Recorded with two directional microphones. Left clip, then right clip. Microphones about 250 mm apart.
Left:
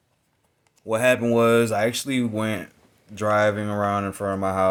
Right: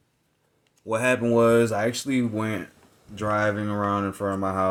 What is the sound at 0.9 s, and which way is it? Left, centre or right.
Speech, left.